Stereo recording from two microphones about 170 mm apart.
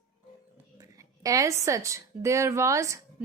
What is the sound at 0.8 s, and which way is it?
A woman's voice, 20° right (ahead or behind).